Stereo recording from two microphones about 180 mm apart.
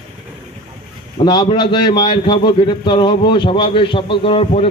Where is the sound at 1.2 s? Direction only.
25° left (ahead or behind).